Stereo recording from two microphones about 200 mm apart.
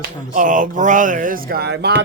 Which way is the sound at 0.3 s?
40° right (ahead or behind).